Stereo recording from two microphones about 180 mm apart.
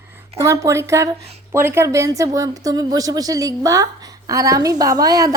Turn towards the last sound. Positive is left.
turn(degrees=-20)  # may be behind; listen again after turning